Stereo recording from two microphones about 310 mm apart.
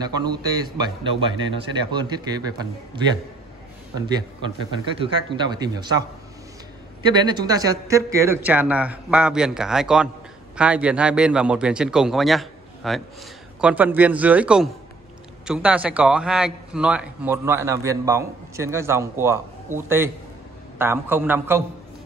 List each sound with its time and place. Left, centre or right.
0.0 s a man's voice: centre
5.0 s a man's voice: centre
7.2 s a man's voice: centre